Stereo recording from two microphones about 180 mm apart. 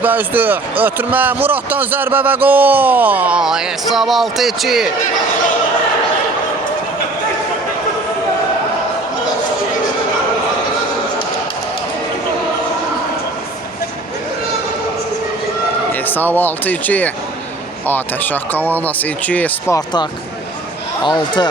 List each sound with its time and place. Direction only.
0.0 s speech: 10° right (ahead or behind)
15.9 s speech: 10° left (ahead or behind)